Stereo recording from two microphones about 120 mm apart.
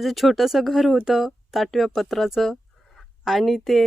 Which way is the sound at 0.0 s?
Centre (ahead or behind).